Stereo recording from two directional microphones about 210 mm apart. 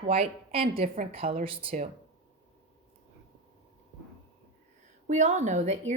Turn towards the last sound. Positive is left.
turn(degrees=-35)  # may be behind; listen again after turning